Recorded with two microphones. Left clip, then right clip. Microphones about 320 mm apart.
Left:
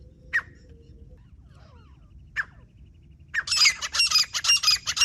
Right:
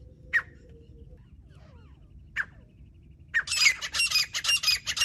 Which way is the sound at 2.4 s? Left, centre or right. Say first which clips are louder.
Left 2 dB; centre.